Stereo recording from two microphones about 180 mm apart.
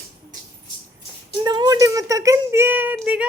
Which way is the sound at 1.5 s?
25° right (ahead or behind).